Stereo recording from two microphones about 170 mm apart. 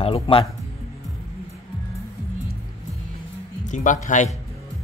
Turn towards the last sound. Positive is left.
turn(degrees=50)  # may be behind; listen again after turning